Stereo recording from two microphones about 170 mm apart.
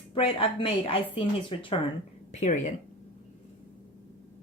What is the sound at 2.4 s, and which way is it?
Speech, 45° left (ahead or behind).